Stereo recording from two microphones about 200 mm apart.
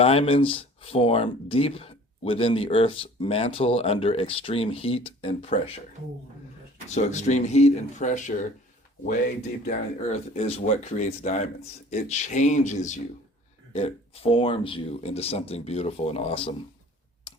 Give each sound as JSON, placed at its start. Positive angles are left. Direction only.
{"t": 0.0, "sound": "speech", "side_deg": 30}
{"t": 6.9, "sound": "speech", "side_deg": 35}
{"t": 9.6, "sound": "speech", "side_deg": 35}